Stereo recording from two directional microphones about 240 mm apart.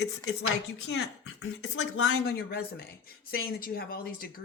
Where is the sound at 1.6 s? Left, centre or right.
Left.